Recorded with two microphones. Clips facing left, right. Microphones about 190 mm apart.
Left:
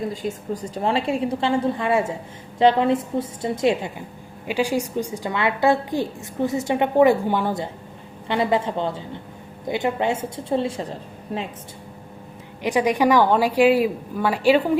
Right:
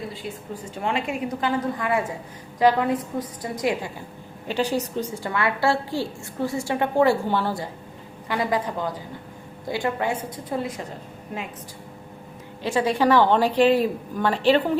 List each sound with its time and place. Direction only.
0.1 s a woman's voice: 45° left (ahead or behind); by 3.9 s 25° left (ahead or behind)
4.4 s a woman's voice: 10° left (ahead or behind); by 11.4 s 35° left (ahead or behind)
12.6 s a woman's voice: 15° left (ahead or behind)